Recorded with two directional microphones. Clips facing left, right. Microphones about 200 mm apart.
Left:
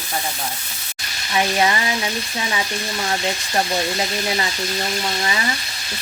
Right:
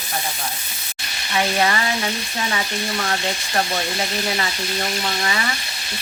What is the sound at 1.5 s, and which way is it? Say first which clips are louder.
Frying: left 1 dB; 20° left (ahead or behind).